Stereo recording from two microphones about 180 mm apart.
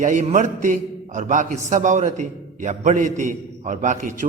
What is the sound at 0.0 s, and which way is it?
A man's voice, 45° right (ahead or behind).